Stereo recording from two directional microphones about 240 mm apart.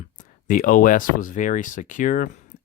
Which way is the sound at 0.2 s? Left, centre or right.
Left.